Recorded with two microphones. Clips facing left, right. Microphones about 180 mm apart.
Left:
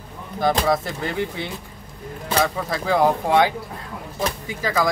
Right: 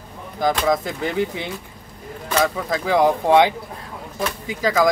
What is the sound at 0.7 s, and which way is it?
Speech, 20° right (ahead or behind).